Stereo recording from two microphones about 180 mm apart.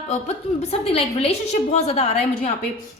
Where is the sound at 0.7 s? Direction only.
35° left (ahead or behind).